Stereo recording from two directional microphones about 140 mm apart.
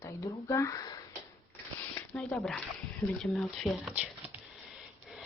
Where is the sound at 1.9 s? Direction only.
10° left (ahead or behind); by 4.3 s 10° right (ahead or behind).